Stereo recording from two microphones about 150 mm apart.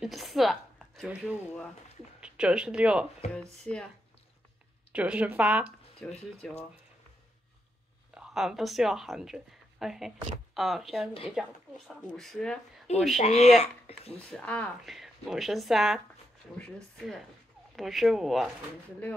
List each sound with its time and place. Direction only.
0.0 s a woman's voice: centre (ahead or behind)
3.7 s speech: 5° left (ahead or behind)
4.9 s a woman's voice: 10° right (ahead or behind)
6.0 s speech: 5° left (ahead or behind)
8.1 s speech: 5° right (ahead or behind)
12.9 s speech: 50° left (ahead or behind)
14.1 s speech: 10° left (ahead or behind)
17.7 s speech: centre (ahead or behind)